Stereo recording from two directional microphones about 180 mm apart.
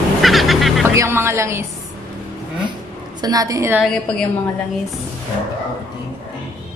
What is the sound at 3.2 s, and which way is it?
Speech, 20° right (ahead or behind).